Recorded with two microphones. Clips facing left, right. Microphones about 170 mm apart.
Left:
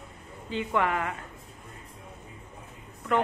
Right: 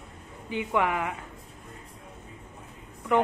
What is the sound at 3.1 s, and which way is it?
Speech, 15° right (ahead or behind).